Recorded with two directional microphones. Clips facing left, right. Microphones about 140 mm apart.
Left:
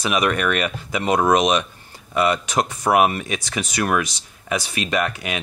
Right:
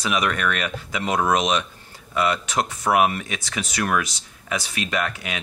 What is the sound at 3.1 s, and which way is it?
Speech, 15° left (ahead or behind).